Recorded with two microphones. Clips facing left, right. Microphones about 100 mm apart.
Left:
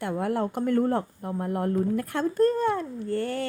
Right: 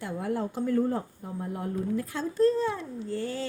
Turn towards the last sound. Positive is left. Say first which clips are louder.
# left 4 dB
turn(degrees=60)  # may be behind; listen again after turning